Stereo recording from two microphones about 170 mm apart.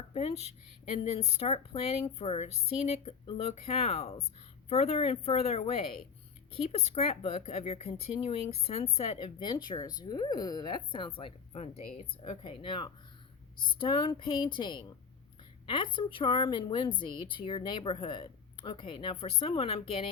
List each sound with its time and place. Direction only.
0.1 s a woman's voice: 40° left (ahead or behind)